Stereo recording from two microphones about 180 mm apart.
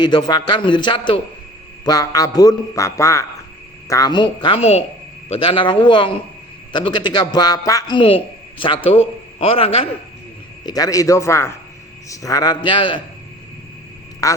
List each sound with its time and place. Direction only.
0.0 s a man's voice: 25° left (ahead or behind)
10.7 s a man's voice: 20° left (ahead or behind)
14.2 s a man's voice: 20° left (ahead or behind)